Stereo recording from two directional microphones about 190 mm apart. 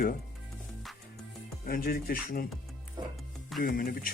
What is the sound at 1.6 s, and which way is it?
Speech, 50° left (ahead or behind).